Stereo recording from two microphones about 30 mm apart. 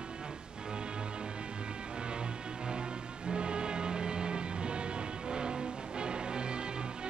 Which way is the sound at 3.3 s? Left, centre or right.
Right.